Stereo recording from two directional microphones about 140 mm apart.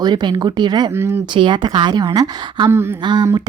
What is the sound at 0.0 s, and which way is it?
A woman's voice, 30° right (ahead or behind).